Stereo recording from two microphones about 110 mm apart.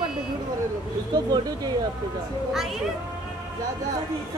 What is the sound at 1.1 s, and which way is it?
Speech, 40° right (ahead or behind).